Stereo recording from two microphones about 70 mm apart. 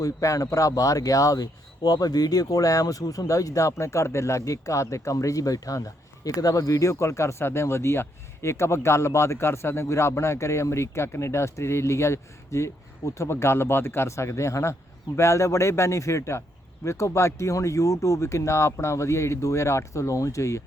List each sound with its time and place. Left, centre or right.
0.0 s speech: left